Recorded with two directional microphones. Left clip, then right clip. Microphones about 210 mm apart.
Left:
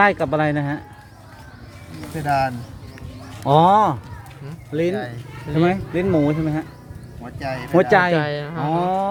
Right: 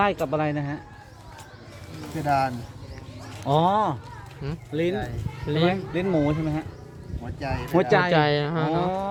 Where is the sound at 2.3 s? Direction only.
25° left (ahead or behind).